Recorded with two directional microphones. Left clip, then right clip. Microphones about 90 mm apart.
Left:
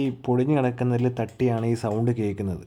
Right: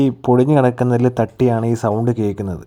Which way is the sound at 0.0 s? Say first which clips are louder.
Right 10 dB; 90° right.